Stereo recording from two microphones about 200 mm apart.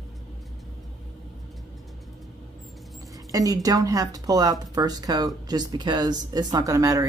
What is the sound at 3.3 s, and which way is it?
Speech, 15° right (ahead or behind).